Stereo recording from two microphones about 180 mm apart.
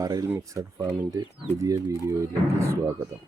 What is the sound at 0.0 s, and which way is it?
Speech, 20° right (ahead or behind).